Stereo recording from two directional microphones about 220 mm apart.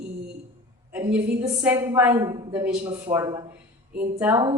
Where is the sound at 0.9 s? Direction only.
10° right (ahead or behind).